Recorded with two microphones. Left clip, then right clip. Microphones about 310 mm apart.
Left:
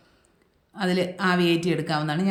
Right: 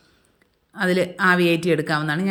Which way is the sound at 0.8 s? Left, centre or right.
Centre.